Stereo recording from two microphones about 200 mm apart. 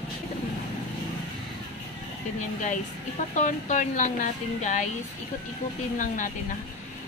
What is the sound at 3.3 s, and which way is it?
A woman's voice, 40° left (ahead or behind).